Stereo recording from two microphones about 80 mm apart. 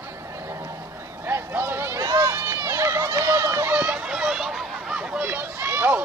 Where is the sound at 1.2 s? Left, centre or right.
Right.